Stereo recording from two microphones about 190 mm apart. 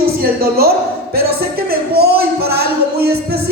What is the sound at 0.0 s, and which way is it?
Speech, 55° right (ahead or behind).